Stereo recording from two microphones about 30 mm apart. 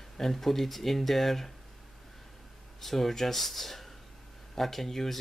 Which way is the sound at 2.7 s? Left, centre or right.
Centre.